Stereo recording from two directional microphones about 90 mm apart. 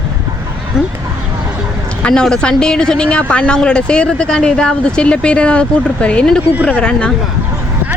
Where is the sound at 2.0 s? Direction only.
10° left (ahead or behind).